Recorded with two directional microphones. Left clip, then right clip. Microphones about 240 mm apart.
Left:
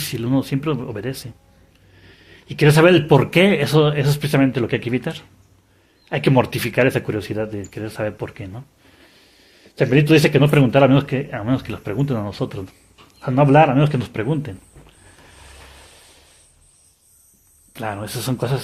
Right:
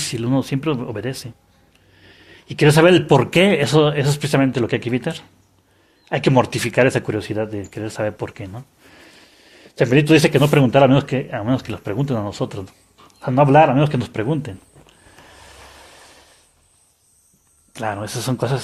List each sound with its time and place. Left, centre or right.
0.0 s speech: right
13.2 s a sound: right
17.7 s speech: right